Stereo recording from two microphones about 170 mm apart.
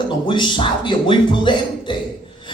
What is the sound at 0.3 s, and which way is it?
A man's voice, 25° left (ahead or behind).